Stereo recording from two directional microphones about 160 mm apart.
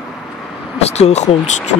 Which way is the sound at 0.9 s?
45° left (ahead or behind).